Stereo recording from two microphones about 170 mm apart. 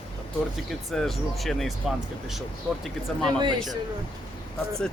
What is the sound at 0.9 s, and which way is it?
Speech, centre (ahead or behind).